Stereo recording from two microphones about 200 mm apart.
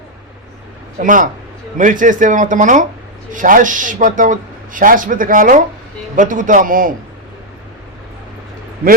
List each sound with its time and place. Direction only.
0.9 s speech: 40° right (ahead or behind)